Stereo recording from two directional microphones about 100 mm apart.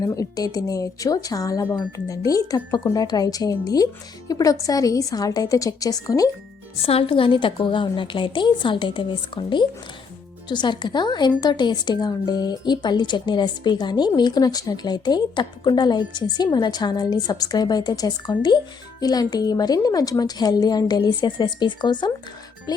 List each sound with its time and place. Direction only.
0.0 s a woman's voice: 35° left (ahead or behind)
6.7 s a woman's voice: 75° left (ahead or behind); by 22.1 s 45° left (ahead or behind)